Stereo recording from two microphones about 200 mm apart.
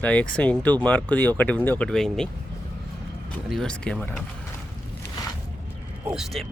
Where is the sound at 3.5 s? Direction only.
5° left (ahead or behind).